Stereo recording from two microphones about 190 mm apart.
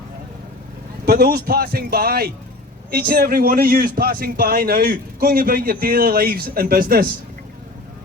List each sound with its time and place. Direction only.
1.0 s a man's voice: 55° right (ahead or behind)